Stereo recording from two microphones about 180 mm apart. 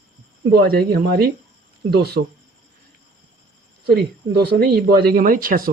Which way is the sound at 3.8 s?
60° right (ahead or behind).